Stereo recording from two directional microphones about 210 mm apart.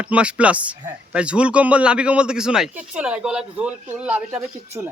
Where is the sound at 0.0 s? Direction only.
5° right (ahead or behind).